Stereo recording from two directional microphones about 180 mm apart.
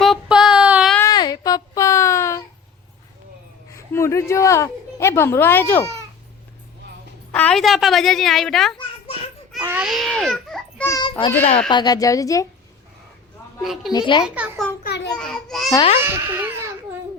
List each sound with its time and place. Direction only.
0.0 s child singing: centre (ahead or behind)
0.9 s music: 20° left (ahead or behind)
3.7 s a woman's voice: 15° left (ahead or behind)
7.3 s a woman's voice: 5° left (ahead or behind)
9.6 s baby cry: 15° right (ahead or behind)
9.8 s baby cry: centre (ahead or behind)
10.8 s a sound: 25° left (ahead or behind)
11.7 s a woman's voice: 25° left (ahead or behind)
13.6 s a woman's voice: centre (ahead or behind)
13.9 s a woman's voice: 25° left (ahead or behind)
14.3 s a child's voice: 10° right (ahead or behind)
14.8 s a sound: 70° left (ahead or behind)
15.1 s a child's voice: 5° left (ahead or behind)
16.1 s baby cry: 10° right (ahead or behind)